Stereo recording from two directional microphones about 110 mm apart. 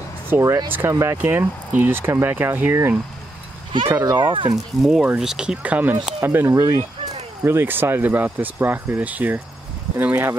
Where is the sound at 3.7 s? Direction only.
40° right (ahead or behind).